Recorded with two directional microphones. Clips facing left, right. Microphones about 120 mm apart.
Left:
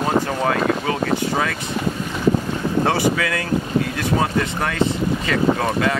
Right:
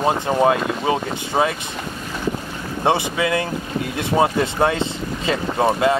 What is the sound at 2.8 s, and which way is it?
Speech, 20° right (ahead or behind).